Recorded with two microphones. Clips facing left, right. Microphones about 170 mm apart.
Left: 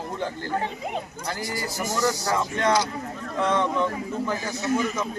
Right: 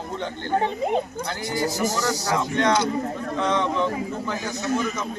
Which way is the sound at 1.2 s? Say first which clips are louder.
Right 4 dB; 5° left (ahead or behind).